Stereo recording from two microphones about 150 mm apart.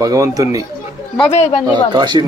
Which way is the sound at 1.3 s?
45° left (ahead or behind).